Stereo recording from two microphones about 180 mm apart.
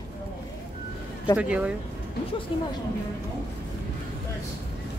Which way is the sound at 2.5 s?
30° left (ahead or behind).